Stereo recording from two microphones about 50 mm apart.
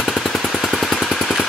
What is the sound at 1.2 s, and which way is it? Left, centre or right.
Vehicle, centre.